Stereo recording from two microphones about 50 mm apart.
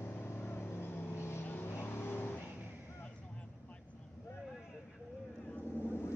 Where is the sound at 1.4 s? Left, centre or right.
Left.